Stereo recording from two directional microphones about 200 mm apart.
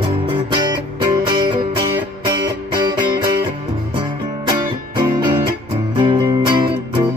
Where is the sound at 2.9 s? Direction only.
20° right (ahead or behind).